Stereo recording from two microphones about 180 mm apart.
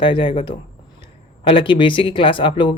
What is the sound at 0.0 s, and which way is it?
Speech, 30° left (ahead or behind).